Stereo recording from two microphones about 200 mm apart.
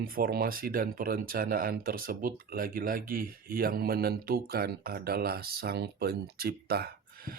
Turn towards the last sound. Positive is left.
turn(degrees=-50)  # may be behind; listen again after turning